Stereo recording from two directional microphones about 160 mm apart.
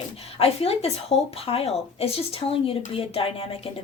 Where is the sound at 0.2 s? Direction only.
40° left (ahead or behind).